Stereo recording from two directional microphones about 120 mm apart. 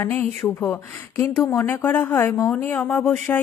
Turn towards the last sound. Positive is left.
turn(degrees=15)  # may be behind; listen again after turning